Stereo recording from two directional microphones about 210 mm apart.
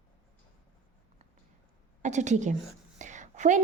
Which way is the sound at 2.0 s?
35° right (ahead or behind).